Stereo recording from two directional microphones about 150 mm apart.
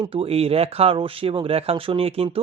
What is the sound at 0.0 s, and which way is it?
Speech, 40° right (ahead or behind).